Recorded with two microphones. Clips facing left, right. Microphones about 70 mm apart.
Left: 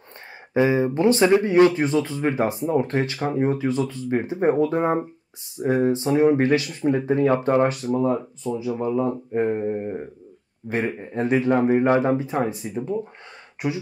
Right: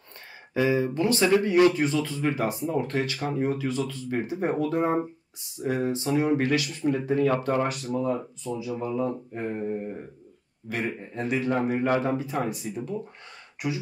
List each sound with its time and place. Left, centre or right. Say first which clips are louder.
0.6 s speech: left 4 dB; left